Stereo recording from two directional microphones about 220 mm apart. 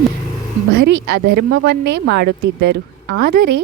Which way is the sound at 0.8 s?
50° right (ahead or behind).